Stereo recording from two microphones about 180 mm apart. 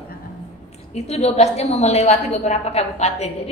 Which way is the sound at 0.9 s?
35° left (ahead or behind).